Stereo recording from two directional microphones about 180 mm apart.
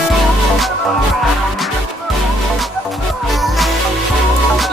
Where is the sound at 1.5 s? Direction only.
Centre (ahead or behind).